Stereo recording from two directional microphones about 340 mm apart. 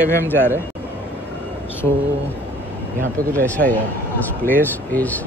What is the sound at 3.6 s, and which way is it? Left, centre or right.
Speech, right.